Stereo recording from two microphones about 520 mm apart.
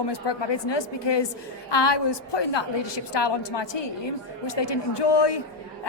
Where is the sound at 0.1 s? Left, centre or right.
Left.